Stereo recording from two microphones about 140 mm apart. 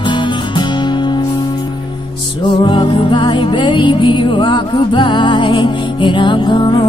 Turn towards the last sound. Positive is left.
turn(degrees=35)  # may be behind; listen again after turning